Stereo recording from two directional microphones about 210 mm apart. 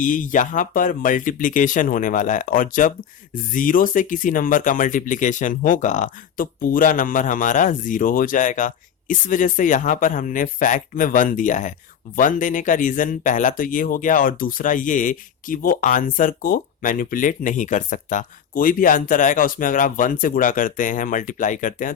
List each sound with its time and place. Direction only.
0.0 s speech: 40° left (ahead or behind)